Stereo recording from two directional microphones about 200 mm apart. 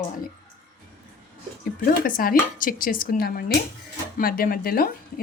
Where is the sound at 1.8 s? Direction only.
45° left (ahead or behind).